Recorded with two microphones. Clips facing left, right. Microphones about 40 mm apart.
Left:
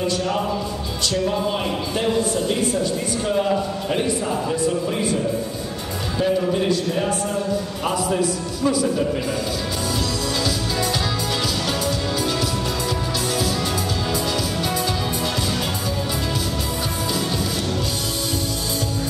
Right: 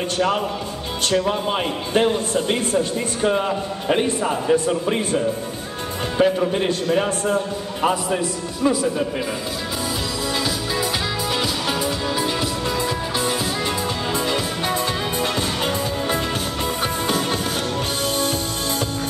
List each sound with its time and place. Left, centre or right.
1.0 s speech: right
4.5 s speech: right
7.8 s a man's voice: centre